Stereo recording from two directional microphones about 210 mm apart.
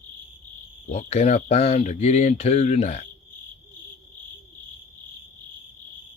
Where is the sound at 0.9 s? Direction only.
30° left (ahead or behind).